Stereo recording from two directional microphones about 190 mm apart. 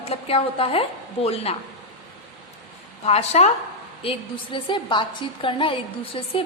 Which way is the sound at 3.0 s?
35° left (ahead or behind).